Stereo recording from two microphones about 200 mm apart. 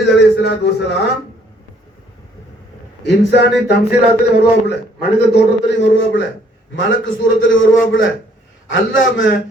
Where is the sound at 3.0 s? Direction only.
60° left (ahead or behind).